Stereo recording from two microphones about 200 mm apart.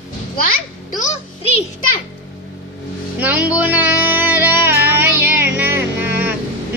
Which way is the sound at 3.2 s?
5° right (ahead or behind).